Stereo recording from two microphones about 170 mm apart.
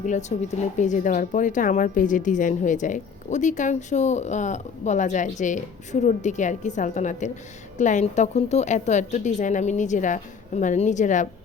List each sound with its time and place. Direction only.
0.0 s a woman's voice: 45° left (ahead or behind)